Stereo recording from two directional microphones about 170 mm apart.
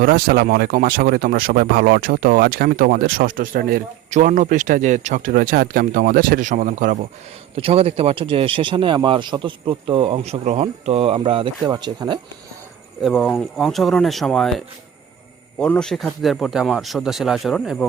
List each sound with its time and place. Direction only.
0.0 s speech: 60° right (ahead or behind)
4.1 s speech: 50° right (ahead or behind)
7.5 s speech: 35° right (ahead or behind)
13.0 s speech: centre (ahead or behind)